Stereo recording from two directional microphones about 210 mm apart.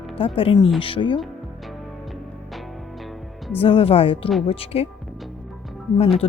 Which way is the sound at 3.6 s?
25° left (ahead or behind).